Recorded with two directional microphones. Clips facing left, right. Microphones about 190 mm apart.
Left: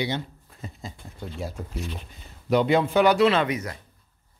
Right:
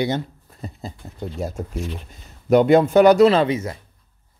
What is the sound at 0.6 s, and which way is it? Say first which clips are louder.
Speech: right 5 dB; 35° right (ahead or behind).